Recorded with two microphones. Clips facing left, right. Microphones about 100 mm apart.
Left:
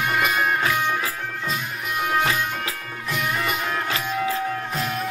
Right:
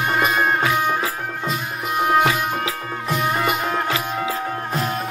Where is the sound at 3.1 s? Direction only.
35° right (ahead or behind).